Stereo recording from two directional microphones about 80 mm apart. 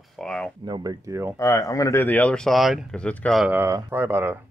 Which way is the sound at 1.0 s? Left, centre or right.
Right.